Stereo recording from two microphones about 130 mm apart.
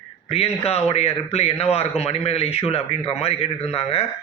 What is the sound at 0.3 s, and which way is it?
Speech, 50° left (ahead or behind).